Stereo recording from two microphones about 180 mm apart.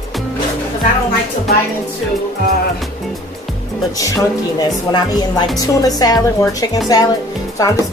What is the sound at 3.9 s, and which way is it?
A woman's voice, 20° left (ahead or behind).